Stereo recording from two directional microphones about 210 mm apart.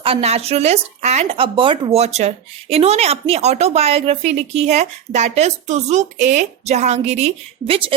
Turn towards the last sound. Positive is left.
turn(degrees=-25)  # may be behind; listen again after turning